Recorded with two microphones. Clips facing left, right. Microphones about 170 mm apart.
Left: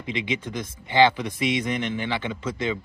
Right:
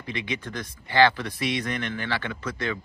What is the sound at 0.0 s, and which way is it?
Speech, 20° left (ahead or behind).